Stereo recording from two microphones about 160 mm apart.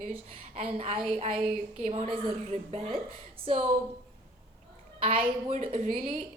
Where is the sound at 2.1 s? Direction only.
35° right (ahead or behind).